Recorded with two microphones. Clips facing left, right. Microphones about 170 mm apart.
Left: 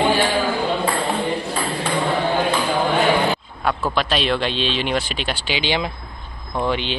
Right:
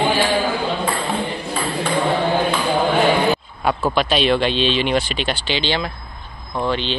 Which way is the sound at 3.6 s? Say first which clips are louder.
Right 2 dB; centre (ahead or behind).